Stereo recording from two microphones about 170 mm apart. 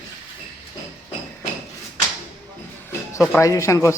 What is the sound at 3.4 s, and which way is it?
Speech, 20° left (ahead or behind).